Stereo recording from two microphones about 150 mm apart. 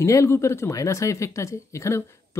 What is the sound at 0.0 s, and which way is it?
Speech, 20° left (ahead or behind).